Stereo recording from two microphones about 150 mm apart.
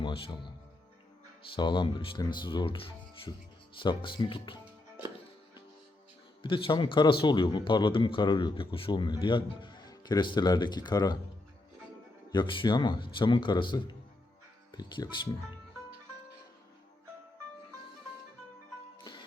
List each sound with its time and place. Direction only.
0.0 s speech: 30° left (ahead or behind)
1.5 s speech: 30° left (ahead or behind)
6.4 s speech: 35° left (ahead or behind)
12.3 s speech: 30° left (ahead or behind)
18.9 s music: 30° left (ahead or behind)